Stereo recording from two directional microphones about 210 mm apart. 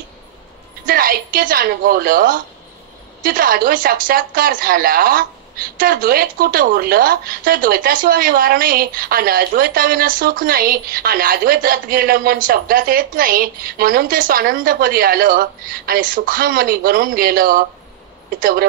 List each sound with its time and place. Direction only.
0.8 s a woman's voice: 45° right (ahead or behind)